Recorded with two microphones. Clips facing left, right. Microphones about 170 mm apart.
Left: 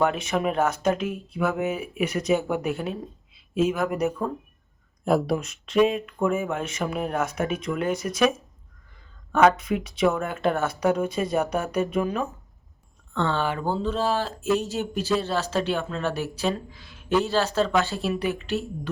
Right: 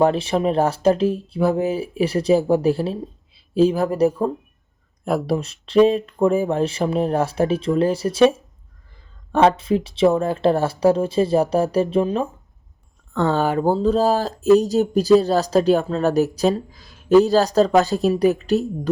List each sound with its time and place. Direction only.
0.0 s speech: 30° right (ahead or behind)
5.0 s speech: centre (ahead or behind)
5.4 s speech: 30° right (ahead or behind)
13.1 s speech: 40° right (ahead or behind)